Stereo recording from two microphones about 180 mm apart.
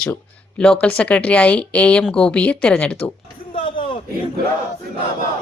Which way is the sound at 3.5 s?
30° left (ahead or behind).